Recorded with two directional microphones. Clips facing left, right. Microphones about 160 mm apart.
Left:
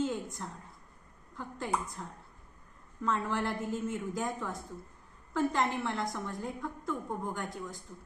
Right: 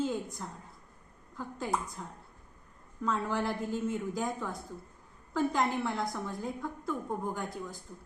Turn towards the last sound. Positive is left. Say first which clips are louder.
# right 1 dB
turn(degrees=0)  # may be behind; listen again after turning